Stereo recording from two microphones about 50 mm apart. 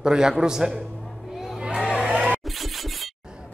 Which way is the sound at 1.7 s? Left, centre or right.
Centre.